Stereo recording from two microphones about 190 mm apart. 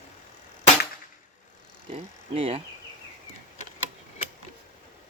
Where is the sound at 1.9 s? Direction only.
30° right (ahead or behind).